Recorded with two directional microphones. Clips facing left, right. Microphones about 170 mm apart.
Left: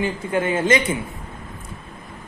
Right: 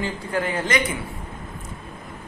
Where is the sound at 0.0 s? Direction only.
25° left (ahead or behind).